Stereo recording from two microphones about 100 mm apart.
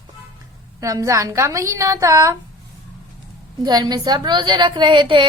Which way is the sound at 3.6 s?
45° right (ahead or behind).